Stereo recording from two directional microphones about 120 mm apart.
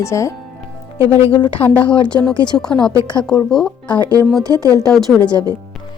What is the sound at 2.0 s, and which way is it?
A woman's voice, 10° left (ahead or behind).